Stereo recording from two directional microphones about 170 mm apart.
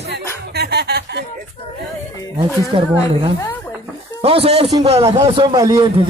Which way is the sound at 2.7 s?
30° right (ahead or behind).